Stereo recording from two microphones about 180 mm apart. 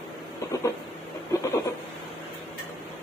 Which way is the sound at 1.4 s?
15° left (ahead or behind).